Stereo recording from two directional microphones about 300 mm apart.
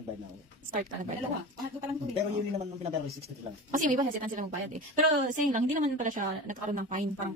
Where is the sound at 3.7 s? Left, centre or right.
Right.